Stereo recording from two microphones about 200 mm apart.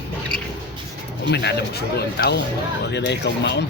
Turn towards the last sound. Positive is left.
turn(degrees=60)  # may be behind; listen again after turning